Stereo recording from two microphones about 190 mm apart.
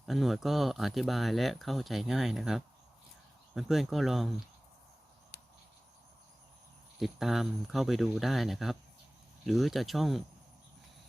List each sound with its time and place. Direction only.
0.0 s speech: centre (ahead or behind)
5.3 s a sound: 60° left (ahead or behind)
7.0 s speech: centre (ahead or behind)